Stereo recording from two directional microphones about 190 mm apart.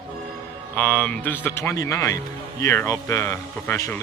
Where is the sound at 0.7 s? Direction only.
10° left (ahead or behind).